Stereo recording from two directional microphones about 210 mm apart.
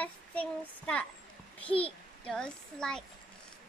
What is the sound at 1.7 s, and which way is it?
Speech, 25° left (ahead or behind).